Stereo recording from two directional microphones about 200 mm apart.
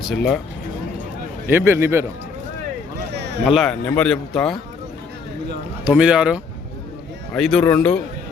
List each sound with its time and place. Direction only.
1.5 s a man's voice: 10° right (ahead or behind)
3.1 s a sound: 55° right (ahead or behind)
3.4 s speech: centre (ahead or behind)
5.8 s speech: 5° right (ahead or behind)